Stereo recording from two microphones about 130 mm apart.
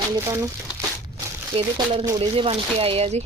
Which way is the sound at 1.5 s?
45° right (ahead or behind).